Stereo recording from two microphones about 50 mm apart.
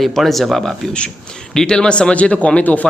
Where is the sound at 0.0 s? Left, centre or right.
Centre.